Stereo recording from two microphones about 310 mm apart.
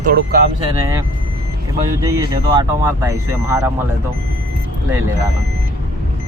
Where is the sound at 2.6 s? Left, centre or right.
Centre.